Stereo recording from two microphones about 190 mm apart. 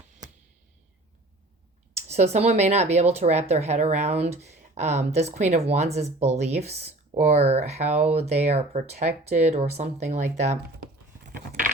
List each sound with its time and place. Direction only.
2.0 s speech: 35° right (ahead or behind)